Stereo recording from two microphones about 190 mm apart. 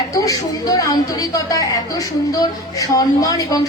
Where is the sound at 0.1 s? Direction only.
20° left (ahead or behind).